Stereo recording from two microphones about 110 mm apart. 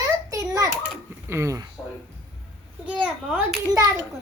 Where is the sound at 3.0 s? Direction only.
10° right (ahead or behind).